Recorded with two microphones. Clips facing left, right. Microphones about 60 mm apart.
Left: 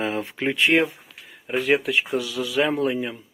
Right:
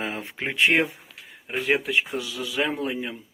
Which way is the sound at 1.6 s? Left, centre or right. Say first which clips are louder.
Left 1 dB; centre.